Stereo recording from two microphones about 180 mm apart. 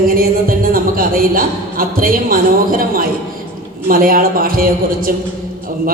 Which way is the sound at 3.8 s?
50° right (ahead or behind).